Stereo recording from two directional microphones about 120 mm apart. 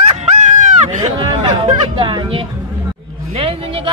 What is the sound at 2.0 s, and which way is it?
Speech, 40° right (ahead or behind).